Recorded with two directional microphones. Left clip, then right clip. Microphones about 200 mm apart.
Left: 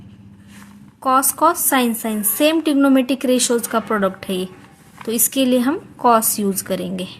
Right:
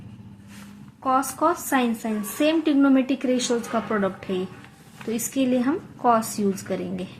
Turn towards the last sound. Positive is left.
turn(degrees=40)  # may be behind; listen again after turning